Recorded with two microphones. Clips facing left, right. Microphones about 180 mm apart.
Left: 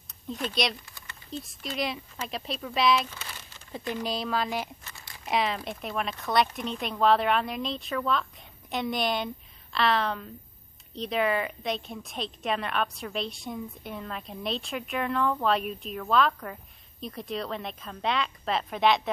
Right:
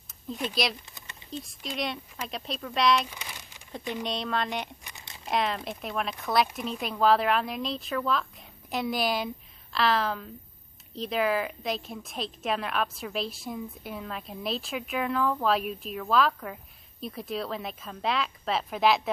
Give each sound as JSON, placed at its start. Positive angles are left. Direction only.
{"t": 0.5, "sound": "a woman's voice", "side_deg": 0}
{"t": 3.1, "sound": "crumpling", "side_deg": -15}
{"t": 3.9, "sound": "a woman's voice", "side_deg": 0}
{"t": 4.8, "sound": "crumpling", "side_deg": -20}
{"t": 5.2, "sound": "a woman's voice", "side_deg": 0}